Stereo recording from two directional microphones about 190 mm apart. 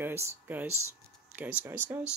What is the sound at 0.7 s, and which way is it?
Speech, 90° right.